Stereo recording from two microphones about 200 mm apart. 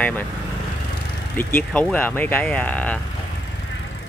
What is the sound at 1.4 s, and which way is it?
Speech, 10° left (ahead or behind).